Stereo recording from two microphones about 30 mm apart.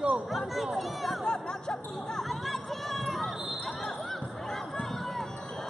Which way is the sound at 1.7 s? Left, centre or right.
Centre.